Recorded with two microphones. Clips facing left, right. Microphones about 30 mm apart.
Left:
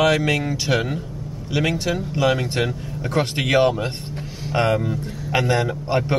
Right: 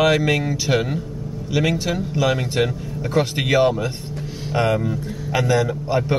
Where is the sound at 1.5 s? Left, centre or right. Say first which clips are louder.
Right 1 dB; left.